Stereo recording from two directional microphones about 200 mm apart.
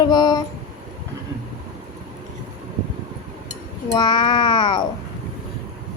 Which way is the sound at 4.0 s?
20° left (ahead or behind).